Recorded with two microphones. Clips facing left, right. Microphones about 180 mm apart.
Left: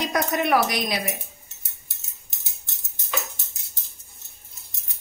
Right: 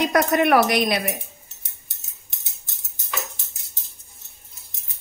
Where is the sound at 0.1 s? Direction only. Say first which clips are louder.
Right 3 dB; 60° right (ahead or behind).